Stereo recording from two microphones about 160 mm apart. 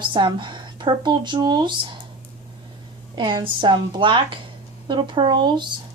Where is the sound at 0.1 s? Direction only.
30° right (ahead or behind).